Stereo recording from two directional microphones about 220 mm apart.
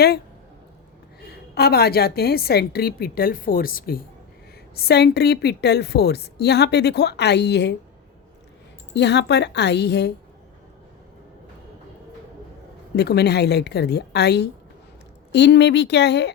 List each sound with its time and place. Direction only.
1.2 s a woman's voice: 45° left (ahead or behind)
8.9 s a woman's voice: 50° left (ahead or behind)
13.0 s a woman's voice: 50° left (ahead or behind)